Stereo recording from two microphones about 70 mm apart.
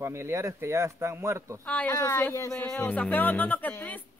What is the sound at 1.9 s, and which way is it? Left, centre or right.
Speech, left.